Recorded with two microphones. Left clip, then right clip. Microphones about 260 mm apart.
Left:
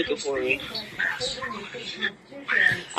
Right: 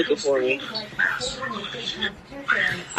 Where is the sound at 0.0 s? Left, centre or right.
Right.